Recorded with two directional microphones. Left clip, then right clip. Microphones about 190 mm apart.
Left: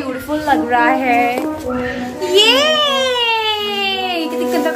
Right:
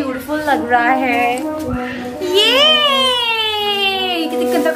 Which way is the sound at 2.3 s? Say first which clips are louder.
Even; 15° left (ahead or behind).